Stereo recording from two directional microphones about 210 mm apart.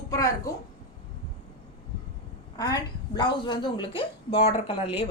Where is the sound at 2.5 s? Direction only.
20° left (ahead or behind).